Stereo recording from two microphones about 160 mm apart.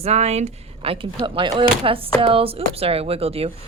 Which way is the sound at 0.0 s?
45° right (ahead or behind).